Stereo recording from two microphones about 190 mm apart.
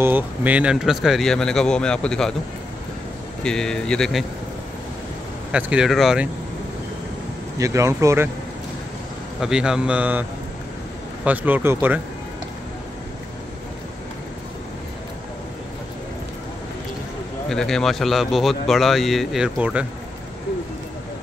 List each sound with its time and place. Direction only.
0.0 s speech: 10° right (ahead or behind)
3.4 s speech: 5° left (ahead or behind)
5.5 s speech: 5° right (ahead or behind)
7.5 s speech: 15° right (ahead or behind)
9.4 s speech: 5° right (ahead or behind)
11.2 s speech: 10° right (ahead or behind)
17.5 s speech: centre (ahead or behind)